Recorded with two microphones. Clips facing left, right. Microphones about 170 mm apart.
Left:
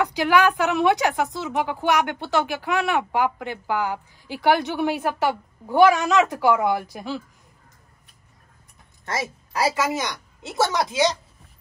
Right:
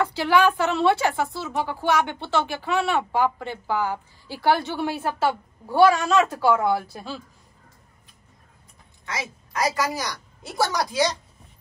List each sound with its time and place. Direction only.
0.0 s a woman's voice: 15° left (ahead or behind)
9.5 s speech: 30° left (ahead or behind)